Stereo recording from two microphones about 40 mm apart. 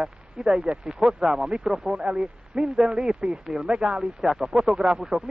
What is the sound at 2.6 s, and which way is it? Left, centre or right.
Speech, right.